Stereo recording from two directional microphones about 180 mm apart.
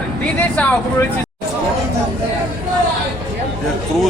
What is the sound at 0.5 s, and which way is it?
Speech, 10° left (ahead or behind).